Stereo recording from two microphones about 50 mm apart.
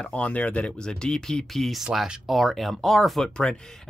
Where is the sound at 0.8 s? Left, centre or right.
Centre.